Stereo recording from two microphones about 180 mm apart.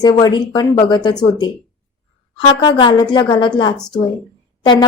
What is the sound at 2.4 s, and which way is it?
A woman's voice, 25° left (ahead or behind).